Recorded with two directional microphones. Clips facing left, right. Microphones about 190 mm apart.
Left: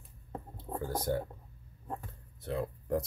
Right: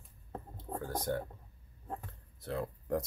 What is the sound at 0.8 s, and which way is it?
Speech, 5° left (ahead or behind).